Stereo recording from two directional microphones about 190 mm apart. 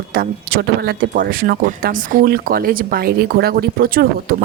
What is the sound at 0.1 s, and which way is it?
A woman's voice, 50° right (ahead or behind).